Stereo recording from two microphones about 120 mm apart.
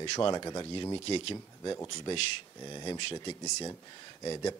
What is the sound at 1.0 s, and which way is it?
Speech, 50° left (ahead or behind).